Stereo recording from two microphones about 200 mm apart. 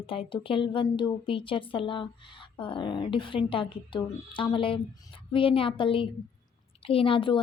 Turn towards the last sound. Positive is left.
turn(degrees=25)  # may be behind; listen again after turning